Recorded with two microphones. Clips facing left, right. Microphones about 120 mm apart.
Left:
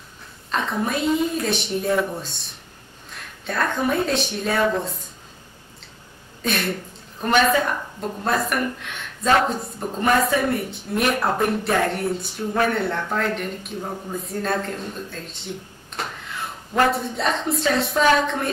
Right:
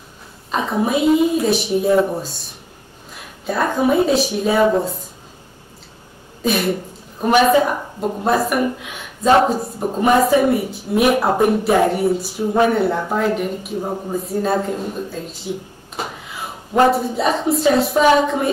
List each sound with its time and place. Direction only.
0.5 s a woman's voice: 5° right (ahead or behind)
2.0 s speech: 25° right (ahead or behind)
3.1 s a woman's voice: 5° right (ahead or behind)
4.6 s speech: 20° right (ahead or behind)
6.4 s a woman's voice: 5° right (ahead or behind)
10.1 s speech: 25° right (ahead or behind)
10.4 s a woman's voice: 5° right (ahead or behind)
13.7 s speech: 20° right (ahead or behind)
14.1 s speech: 5° right (ahead or behind)
16.0 s a sound: 5° right (ahead or behind)
16.9 s a woman's voice: 5° right (ahead or behind)